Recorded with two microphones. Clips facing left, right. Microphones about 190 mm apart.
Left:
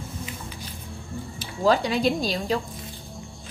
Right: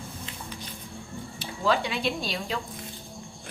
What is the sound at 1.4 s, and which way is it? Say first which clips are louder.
Speech: left 5 dB; 40° left (ahead or behind).